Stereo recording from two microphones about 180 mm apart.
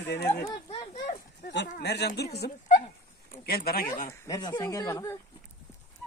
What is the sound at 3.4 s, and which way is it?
Speech, 55° left (ahead or behind).